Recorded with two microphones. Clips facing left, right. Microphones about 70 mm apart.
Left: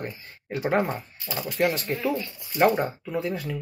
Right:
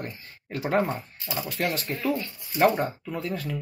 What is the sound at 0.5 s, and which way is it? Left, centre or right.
Speech, centre.